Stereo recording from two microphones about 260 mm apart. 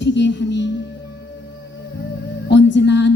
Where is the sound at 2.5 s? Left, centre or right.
Left.